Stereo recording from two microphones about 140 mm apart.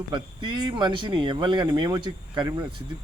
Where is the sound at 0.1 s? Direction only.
35° right (ahead or behind).